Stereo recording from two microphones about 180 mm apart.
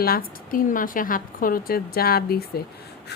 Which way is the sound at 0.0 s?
55° left (ahead or behind).